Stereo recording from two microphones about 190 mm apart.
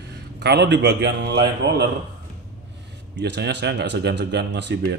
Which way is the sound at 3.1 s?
60° right (ahead or behind).